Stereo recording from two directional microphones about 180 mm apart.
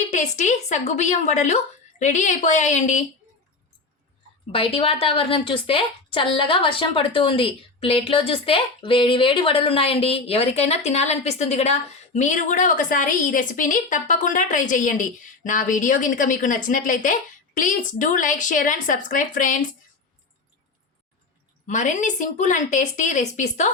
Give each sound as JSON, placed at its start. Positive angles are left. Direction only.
{"t": 0.1, "sound": "a woman's voice", "side_deg": 40}
{"t": 4.5, "sound": "a woman's voice", "side_deg": 30}
{"t": 21.7, "sound": "a woman's voice", "side_deg": 45}